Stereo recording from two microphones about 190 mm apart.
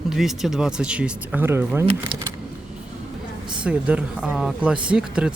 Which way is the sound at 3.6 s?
5° right (ahead or behind).